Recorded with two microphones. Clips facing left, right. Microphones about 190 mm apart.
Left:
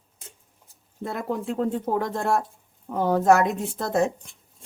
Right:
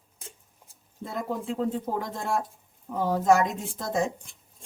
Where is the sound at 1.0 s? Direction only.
65° left (ahead or behind).